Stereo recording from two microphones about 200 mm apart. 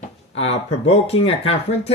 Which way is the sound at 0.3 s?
30° left (ahead or behind).